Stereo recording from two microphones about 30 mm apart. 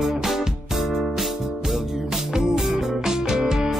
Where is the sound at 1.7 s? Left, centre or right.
Centre.